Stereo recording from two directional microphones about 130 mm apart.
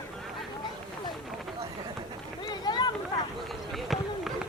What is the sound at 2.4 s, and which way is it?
Run, 35° left (ahead or behind).